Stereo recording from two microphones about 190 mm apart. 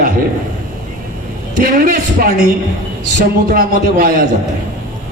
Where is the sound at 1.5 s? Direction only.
50° right (ahead or behind).